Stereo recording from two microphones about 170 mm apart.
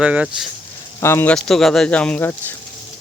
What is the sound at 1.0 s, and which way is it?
Speech, 15° left (ahead or behind).